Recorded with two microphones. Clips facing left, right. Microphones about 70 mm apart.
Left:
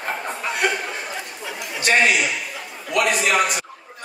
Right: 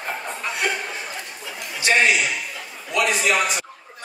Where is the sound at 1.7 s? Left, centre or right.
Left.